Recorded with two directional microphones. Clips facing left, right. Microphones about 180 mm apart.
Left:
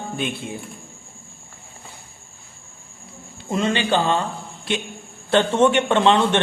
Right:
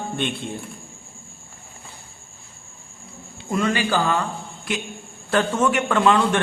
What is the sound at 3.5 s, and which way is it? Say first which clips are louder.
A man's voice: left 1 dB; 25° left (ahead or behind).